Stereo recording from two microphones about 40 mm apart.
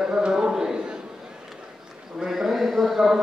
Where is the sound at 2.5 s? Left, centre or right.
Centre.